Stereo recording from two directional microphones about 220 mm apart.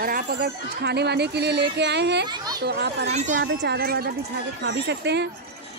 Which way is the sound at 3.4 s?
50° right (ahead or behind).